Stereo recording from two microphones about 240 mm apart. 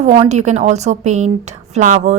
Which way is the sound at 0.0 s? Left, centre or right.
Right.